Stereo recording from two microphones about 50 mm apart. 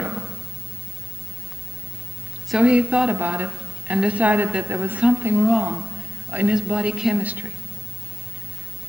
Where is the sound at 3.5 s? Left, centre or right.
Centre.